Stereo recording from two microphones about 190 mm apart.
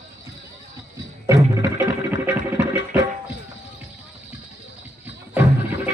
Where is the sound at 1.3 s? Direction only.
15° right (ahead or behind).